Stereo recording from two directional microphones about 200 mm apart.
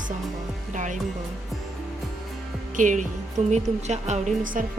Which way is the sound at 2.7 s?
40° right (ahead or behind).